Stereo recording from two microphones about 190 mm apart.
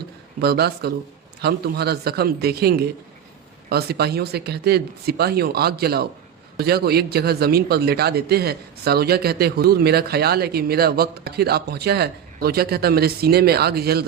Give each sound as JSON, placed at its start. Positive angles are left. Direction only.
{"t": 0.4, "sound": "a man's voice", "side_deg": -55}